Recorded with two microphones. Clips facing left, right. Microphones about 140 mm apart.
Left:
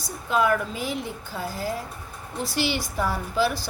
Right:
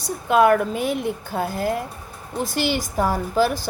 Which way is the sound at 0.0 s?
60° right (ahead or behind).